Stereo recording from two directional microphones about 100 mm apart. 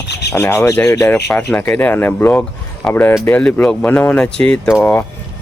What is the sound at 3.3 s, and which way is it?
Speech, 15° left (ahead or behind).